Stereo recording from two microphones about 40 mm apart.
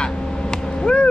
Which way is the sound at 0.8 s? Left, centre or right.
Left.